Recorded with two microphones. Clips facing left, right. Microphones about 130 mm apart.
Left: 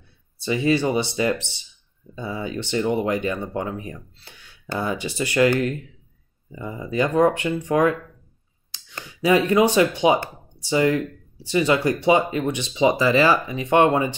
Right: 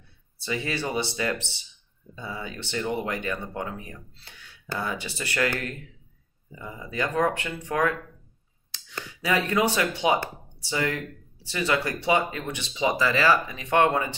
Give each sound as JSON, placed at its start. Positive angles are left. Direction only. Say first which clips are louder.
{"t": 0.5, "sound": "speech", "louder": "left 9 dB", "side_deg": 20}
{"t": 9.2, "sound": "speech", "louder": "left 7 dB", "side_deg": 20}